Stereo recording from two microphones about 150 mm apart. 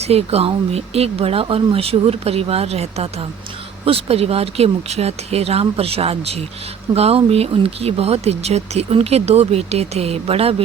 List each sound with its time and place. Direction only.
0.0 s speech: 45° right (ahead or behind)